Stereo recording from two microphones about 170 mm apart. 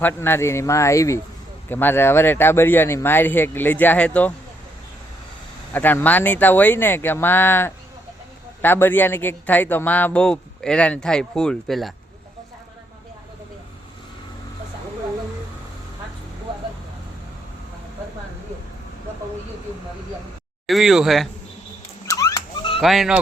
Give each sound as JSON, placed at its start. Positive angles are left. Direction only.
{"t": 0.0, "sound": "a man's voice", "side_deg": 15}
{"t": 5.7, "sound": "a man's voice", "side_deg": 10}
{"t": 20.7, "sound": "speech", "side_deg": 0}
{"t": 22.2, "sound": "dog", "side_deg": 20}
{"t": 22.8, "sound": "speech", "side_deg": 0}